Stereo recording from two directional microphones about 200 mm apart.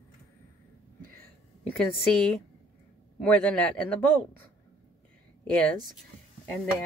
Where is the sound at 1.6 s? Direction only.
5° left (ahead or behind).